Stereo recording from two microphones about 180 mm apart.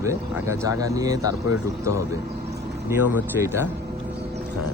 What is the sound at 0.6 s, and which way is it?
Speech, 20° right (ahead or behind).